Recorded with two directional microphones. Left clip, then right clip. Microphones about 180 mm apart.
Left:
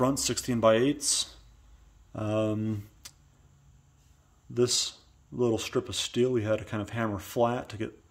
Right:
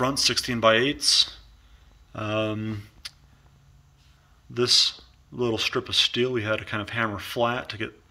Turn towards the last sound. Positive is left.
turn(degrees=35)  # may be behind; listen again after turning